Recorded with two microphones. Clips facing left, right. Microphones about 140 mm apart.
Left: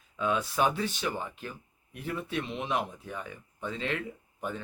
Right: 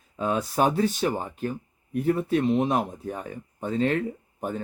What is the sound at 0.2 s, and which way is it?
Speech, 40° right (ahead or behind).